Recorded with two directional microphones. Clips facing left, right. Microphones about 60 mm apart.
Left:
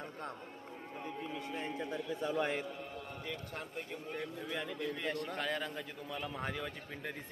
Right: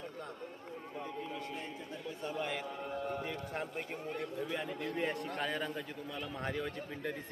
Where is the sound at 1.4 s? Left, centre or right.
Left.